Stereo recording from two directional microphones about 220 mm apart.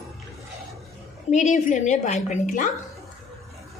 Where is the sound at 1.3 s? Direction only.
35° left (ahead or behind).